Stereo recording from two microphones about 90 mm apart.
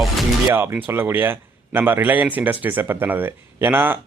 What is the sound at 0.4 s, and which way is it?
A man's voice, 25° right (ahead or behind).